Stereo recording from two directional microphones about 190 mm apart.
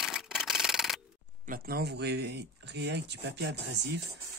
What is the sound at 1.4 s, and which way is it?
Speech, 50° right (ahead or behind).